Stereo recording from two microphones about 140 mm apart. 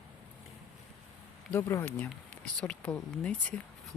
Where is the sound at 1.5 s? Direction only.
20° left (ahead or behind).